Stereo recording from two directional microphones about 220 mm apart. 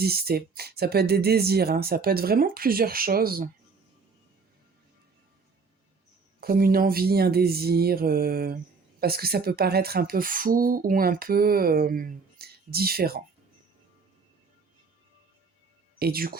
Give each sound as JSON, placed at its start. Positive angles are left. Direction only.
{"t": 0.0, "sound": "speech", "side_deg": -45}
{"t": 6.4, "sound": "speech", "side_deg": -40}
{"t": 16.0, "sound": "speech", "side_deg": -45}